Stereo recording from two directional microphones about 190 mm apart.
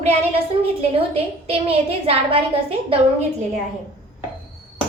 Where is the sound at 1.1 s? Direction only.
30° right (ahead or behind).